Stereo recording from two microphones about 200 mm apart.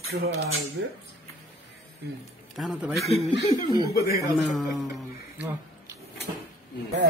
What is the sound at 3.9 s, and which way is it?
Speech, 50° left (ahead or behind).